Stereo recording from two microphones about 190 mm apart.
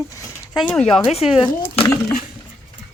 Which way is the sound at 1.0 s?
30° left (ahead or behind).